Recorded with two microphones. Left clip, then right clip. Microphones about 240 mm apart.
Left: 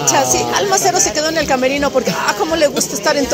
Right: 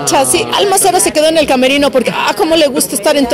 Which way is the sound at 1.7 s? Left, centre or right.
Right.